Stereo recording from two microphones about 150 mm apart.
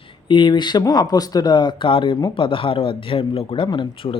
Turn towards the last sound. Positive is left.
turn(degrees=35)  # may be behind; listen again after turning